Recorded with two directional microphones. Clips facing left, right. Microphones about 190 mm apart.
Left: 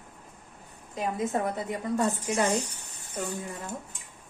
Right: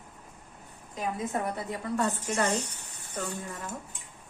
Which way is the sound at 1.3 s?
20° left (ahead or behind).